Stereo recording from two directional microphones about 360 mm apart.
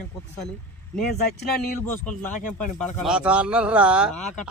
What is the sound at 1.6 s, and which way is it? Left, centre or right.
Speech, centre.